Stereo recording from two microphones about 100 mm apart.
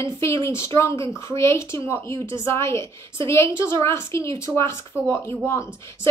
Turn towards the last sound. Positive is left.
turn(degrees=25)  # may be behind; listen again after turning